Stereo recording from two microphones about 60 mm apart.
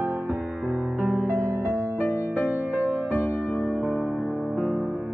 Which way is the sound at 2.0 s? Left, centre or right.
Left.